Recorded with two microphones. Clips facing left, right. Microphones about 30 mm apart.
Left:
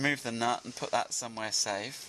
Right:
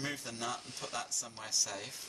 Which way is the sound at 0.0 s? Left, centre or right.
Left.